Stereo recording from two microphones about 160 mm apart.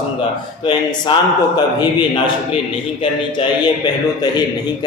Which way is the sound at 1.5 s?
25° left (ahead or behind).